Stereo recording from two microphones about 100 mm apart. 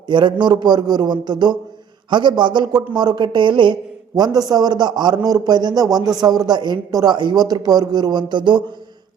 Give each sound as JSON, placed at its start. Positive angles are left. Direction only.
{"t": 0.1, "sound": "a man's voice", "side_deg": -50}